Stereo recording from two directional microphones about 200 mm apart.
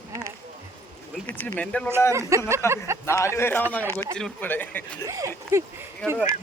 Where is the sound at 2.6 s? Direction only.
15° left (ahead or behind).